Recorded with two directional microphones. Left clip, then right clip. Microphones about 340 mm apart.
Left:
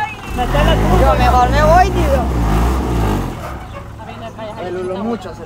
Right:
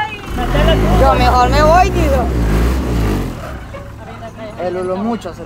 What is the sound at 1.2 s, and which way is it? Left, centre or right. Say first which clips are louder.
Vehicle: right 1 dB; right.